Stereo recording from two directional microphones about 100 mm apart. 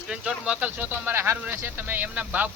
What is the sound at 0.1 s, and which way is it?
Speech, 10° right (ahead or behind).